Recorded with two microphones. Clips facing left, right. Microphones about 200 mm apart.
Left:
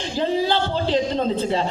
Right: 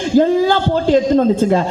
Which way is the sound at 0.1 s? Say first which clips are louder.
Right 9 dB; 50° right (ahead or behind).